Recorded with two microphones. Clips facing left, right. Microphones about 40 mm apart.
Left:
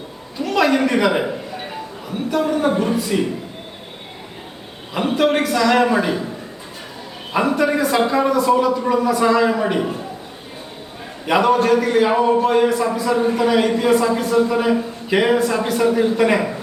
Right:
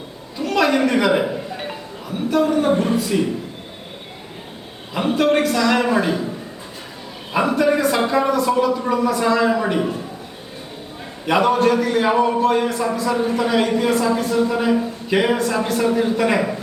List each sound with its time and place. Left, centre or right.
0.4 s a man's voice: centre
2.3 s a man's voice: centre
4.9 s a man's voice: centre
7.3 s a man's voice: centre
11.3 s a man's voice: centre